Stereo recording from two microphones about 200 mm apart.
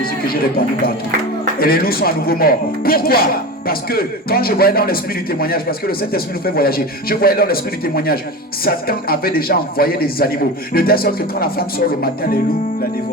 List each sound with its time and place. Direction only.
0.0 s speech: 50° left (ahead or behind)